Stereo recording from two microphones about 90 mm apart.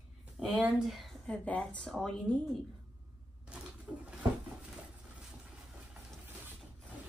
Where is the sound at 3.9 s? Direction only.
10° right (ahead or behind).